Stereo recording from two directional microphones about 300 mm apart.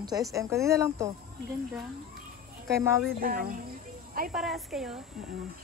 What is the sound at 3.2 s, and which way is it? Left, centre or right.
Speech, right.